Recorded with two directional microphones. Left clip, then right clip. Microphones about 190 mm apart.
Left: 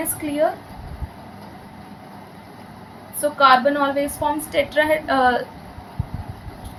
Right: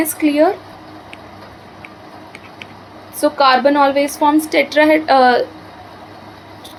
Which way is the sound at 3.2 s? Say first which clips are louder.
Right 3 dB; 40° right (ahead or behind).